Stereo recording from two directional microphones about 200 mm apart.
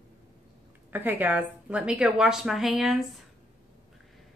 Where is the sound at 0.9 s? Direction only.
10° right (ahead or behind).